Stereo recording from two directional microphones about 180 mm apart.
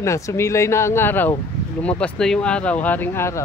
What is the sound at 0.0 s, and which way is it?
Speech, 15° left (ahead or behind).